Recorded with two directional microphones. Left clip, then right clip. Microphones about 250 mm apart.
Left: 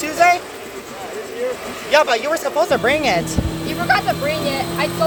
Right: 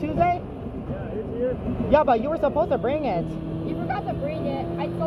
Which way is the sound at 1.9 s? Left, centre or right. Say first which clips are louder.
Left 4 dB; left.